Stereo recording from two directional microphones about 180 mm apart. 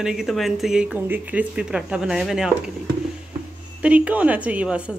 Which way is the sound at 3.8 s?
5° right (ahead or behind).